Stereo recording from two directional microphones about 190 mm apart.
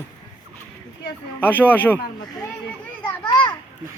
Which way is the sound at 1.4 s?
10° left (ahead or behind).